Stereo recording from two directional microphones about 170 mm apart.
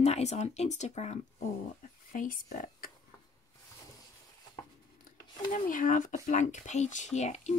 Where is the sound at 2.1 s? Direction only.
50° left (ahead or behind).